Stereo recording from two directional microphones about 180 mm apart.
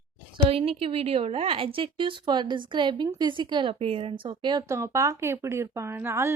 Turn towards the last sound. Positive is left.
turn(degrees=-15)  # may be behind; listen again after turning